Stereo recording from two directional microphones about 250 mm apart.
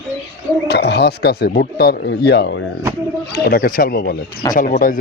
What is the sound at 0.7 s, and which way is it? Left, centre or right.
A man's voice, left.